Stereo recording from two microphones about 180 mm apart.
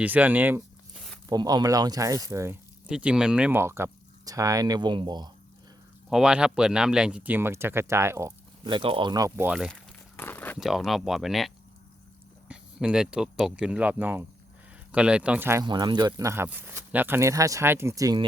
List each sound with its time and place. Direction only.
0.0 s speech: 10° right (ahead or behind)
0.9 s a sound: centre (ahead or behind)
1.3 s speech: 20° right (ahead or behind)
6.1 s speech: 5° right (ahead or behind)
8.6 s speech: 30° right (ahead or behind); by 10.6 s 10° left (ahead or behind)
10.6 s speech: centre (ahead or behind)
15.6 s speech: 25° right (ahead or behind)